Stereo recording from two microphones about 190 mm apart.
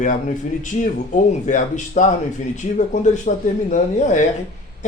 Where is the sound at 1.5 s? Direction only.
40° left (ahead or behind).